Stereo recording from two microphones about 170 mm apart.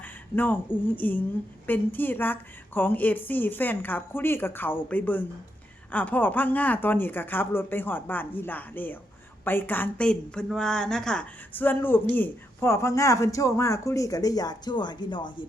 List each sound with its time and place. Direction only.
0.0 s a woman's voice: 10° left (ahead or behind); by 15.3 s 25° left (ahead or behind)